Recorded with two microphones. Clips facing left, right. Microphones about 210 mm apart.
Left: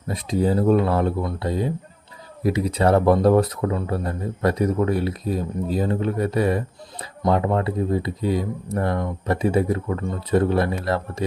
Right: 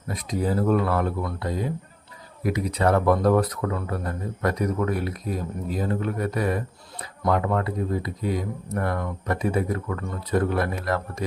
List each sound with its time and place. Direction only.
0.1 s speech: 30° left (ahead or behind)